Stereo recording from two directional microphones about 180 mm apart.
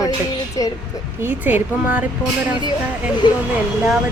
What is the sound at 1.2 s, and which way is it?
Speech, 10° right (ahead or behind).